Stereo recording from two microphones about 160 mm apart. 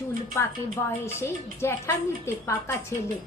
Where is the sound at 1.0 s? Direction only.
15° left (ahead or behind).